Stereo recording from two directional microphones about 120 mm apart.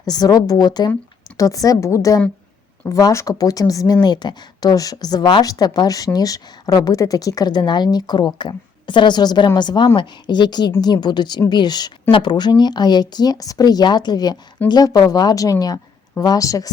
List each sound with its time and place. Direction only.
0.0 s a woman's voice: 35° left (ahead or behind)